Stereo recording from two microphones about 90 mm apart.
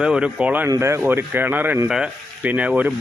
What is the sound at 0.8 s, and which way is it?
Speech, 30° right (ahead or behind).